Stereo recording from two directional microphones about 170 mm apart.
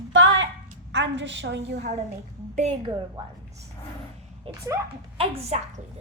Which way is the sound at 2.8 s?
25° right (ahead or behind).